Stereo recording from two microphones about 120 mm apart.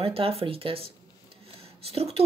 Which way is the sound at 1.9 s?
55° right (ahead or behind).